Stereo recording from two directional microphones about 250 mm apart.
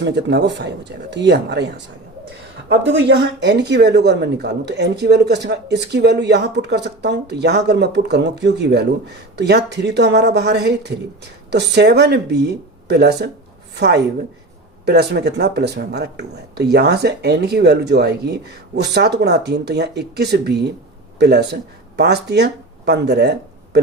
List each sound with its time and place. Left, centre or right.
0.0 s speech: right
2.6 s a woman's voice: right